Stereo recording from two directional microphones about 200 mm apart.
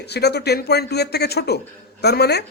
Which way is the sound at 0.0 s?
55° left (ahead or behind).